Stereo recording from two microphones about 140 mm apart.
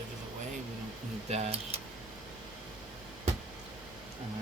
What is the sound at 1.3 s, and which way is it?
Speech, 45° right (ahead or behind).